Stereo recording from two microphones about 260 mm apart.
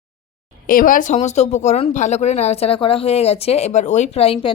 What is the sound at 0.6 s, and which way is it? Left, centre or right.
Speech, left.